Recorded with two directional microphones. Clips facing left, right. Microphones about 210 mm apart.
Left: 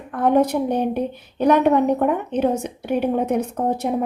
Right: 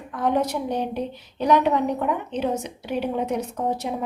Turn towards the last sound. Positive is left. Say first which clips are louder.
# left 4 dB
turn(degrees=55)  # may be behind; listen again after turning